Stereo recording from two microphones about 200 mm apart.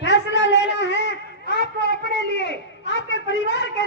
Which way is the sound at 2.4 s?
60° left (ahead or behind).